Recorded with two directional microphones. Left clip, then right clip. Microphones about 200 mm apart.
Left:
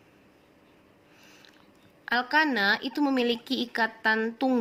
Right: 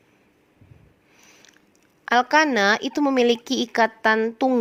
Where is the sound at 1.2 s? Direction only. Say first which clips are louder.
Right 3 dB; 35° right (ahead or behind).